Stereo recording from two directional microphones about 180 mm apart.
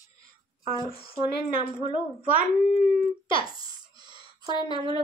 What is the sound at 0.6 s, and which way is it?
Speech, 20° right (ahead or behind).